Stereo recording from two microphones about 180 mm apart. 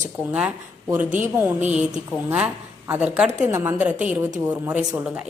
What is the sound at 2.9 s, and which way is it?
A woman's voice, 5° right (ahead or behind).